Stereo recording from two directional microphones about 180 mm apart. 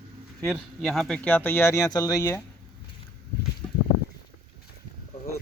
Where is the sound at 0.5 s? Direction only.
Centre (ahead or behind); by 2.4 s 20° left (ahead or behind).